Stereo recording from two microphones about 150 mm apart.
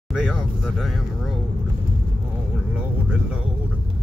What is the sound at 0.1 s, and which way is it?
Speech, centre (ahead or behind).